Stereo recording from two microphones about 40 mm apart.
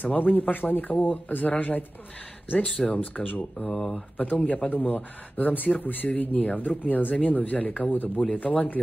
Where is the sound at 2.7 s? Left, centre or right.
Left.